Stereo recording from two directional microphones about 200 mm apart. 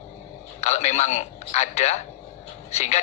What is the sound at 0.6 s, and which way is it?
A man's voice, 35° left (ahead or behind).